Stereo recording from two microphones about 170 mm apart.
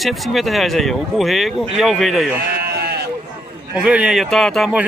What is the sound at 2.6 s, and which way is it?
Sheep, 70° right (ahead or behind).